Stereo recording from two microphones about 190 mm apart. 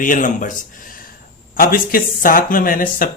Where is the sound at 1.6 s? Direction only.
50° left (ahead or behind).